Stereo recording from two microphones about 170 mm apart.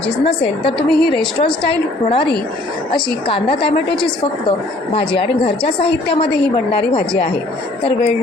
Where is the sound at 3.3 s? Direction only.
30° left (ahead or behind).